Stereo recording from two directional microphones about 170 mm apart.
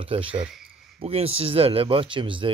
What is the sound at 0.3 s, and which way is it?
Speech, 5° right (ahead or behind).